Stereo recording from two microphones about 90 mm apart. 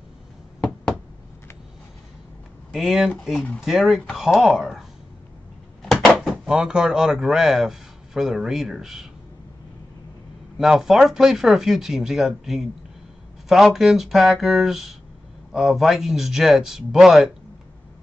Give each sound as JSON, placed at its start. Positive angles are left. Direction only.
{"t": 2.7, "sound": "speech", "side_deg": 0}
{"t": 5.8, "sound": "cupboard open or close", "side_deg": 5}
{"t": 6.4, "sound": "speech", "side_deg": -10}
{"t": 10.6, "sound": "speech", "side_deg": 0}